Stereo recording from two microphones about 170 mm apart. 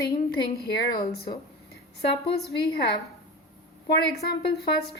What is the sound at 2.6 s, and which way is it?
Speech, 70° left (ahead or behind).